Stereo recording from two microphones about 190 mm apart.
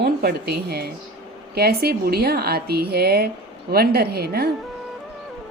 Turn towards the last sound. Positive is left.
turn(degrees=-55)  # may be behind; listen again after turning